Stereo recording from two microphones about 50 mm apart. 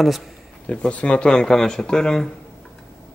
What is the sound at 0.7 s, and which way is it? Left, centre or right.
Speech, left.